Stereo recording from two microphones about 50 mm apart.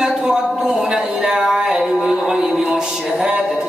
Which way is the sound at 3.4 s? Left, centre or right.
Centre.